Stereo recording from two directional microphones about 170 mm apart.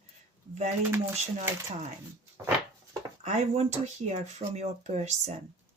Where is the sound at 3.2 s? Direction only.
40° right (ahead or behind).